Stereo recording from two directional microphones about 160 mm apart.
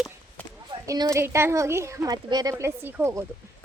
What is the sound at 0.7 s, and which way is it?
A woman's voice, 25° right (ahead or behind).